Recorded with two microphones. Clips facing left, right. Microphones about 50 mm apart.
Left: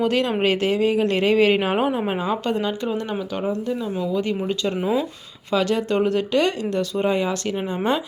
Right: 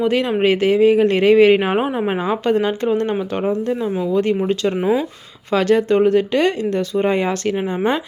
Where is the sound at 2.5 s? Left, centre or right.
Right.